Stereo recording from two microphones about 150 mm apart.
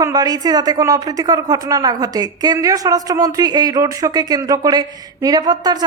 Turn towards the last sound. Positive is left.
turn(degrees=-25)  # may be behind; listen again after turning